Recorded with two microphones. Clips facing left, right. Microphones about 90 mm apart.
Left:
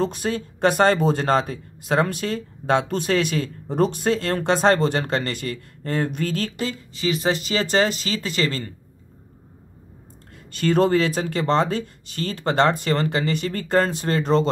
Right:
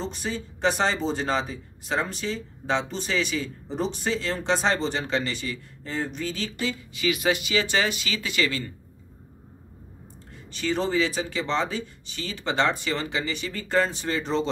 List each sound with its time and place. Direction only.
0.0 s speech: 60° left (ahead or behind); by 8.6 s 40° left (ahead or behind)
10.6 s speech: 55° left (ahead or behind)